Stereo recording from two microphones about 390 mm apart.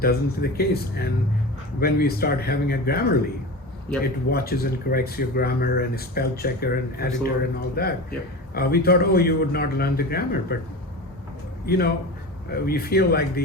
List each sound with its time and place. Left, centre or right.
0.0 s a man's voice: left